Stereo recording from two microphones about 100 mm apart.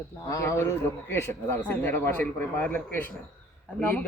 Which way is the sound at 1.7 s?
20° left (ahead or behind).